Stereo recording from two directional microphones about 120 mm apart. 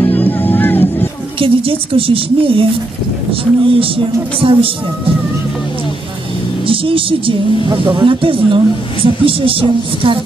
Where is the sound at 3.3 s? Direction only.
50° right (ahead or behind).